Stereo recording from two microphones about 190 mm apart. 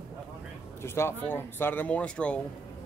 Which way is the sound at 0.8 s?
10° left (ahead or behind).